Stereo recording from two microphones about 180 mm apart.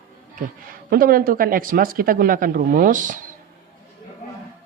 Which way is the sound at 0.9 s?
55° right (ahead or behind).